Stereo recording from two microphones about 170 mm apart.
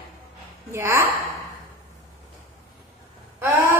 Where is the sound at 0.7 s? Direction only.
15° right (ahead or behind).